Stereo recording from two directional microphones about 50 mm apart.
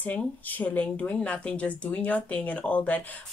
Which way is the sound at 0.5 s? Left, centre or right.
Left.